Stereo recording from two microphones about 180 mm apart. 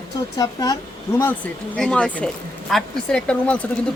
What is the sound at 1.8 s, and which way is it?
Speech, 5° left (ahead or behind).